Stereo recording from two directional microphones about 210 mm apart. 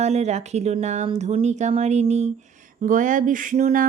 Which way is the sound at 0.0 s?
30° right (ahead or behind).